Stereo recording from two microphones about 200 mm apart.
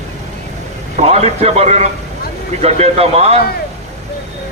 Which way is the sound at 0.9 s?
30° right (ahead or behind).